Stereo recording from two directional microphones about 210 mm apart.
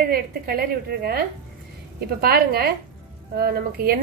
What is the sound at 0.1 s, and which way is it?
A woman's voice, 45° right (ahead or behind).